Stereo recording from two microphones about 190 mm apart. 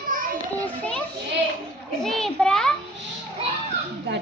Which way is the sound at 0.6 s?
5° left (ahead or behind).